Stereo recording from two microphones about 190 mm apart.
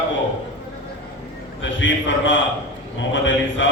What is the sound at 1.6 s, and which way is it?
Speech, 75° left (ahead or behind).